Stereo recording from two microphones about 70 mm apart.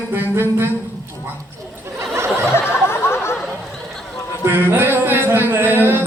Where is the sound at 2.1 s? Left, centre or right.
Right.